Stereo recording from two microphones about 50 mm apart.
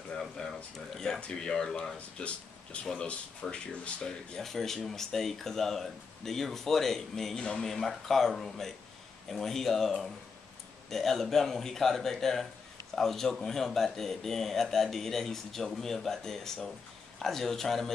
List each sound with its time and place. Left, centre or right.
0.1 s a sound: centre
0.7 s speech: centre
1.2 s speech: centre
2.0 s speech: left
4.4 s speech: centre